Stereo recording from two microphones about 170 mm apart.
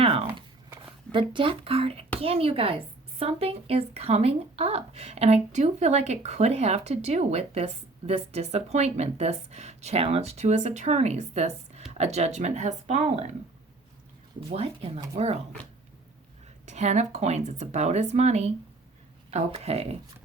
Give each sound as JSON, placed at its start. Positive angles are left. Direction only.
{"t": 0.0, "sound": "a sound", "side_deg": -35}
{"t": 1.1, "sound": "a woman's voice", "side_deg": -30}
{"t": 14.5, "sound": "a woman's voice", "side_deg": -35}
{"t": 16.6, "sound": "a woman's voice", "side_deg": -40}